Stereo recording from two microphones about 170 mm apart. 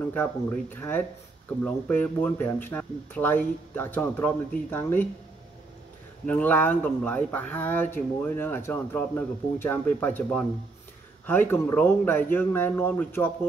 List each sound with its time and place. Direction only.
0.1 s speech: 10° left (ahead or behind)
6.2 s speech: 10° left (ahead or behind)